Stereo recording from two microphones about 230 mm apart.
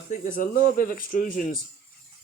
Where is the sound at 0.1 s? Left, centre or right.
Left.